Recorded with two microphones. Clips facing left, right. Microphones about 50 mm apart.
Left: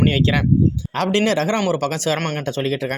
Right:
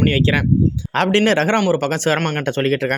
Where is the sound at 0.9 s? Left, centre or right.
Right.